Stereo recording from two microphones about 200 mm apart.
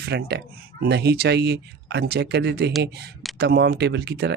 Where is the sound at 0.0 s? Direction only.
55° right (ahead or behind).